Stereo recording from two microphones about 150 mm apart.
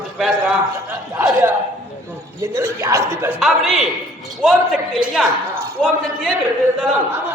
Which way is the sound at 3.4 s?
Centre (ahead or behind).